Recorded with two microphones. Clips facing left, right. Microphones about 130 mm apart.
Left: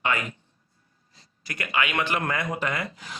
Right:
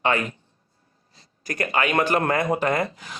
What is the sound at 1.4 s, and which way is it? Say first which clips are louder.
Speech: right 4 dB; 40° right (ahead or behind).